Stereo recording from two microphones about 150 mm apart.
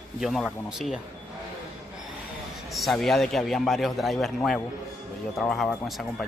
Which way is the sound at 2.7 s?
Centre (ahead or behind).